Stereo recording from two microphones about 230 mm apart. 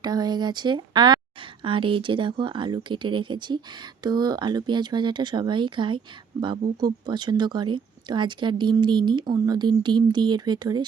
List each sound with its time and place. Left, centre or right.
0.0 s speech: centre